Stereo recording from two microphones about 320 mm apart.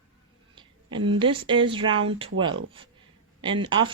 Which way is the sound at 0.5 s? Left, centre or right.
Centre.